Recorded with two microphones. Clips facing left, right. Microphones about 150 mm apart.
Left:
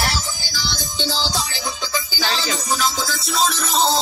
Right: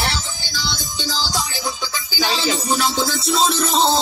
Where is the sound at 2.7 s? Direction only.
30° right (ahead or behind).